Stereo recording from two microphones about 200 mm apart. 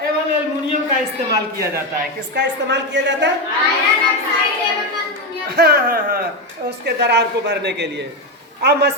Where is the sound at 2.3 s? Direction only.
60° right (ahead or behind).